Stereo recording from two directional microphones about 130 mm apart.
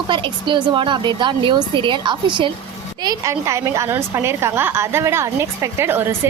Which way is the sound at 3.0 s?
25° right (ahead or behind).